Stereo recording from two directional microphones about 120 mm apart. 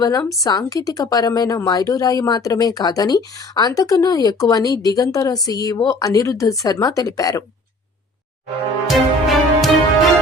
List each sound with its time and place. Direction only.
0.0 s a woman's voice: 30° left (ahead or behind)
8.9 s music: centre (ahead or behind)